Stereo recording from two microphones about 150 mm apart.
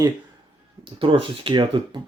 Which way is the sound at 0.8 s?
35° right (ahead or behind).